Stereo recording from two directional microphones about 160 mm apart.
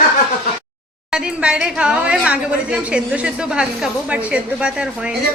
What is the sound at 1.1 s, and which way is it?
A woman's voice, 5° right (ahead or behind).